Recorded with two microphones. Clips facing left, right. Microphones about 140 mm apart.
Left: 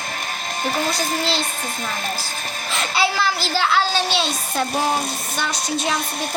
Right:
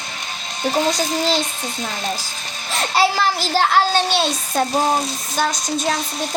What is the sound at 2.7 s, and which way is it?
A child's voice, 40° right (ahead or behind).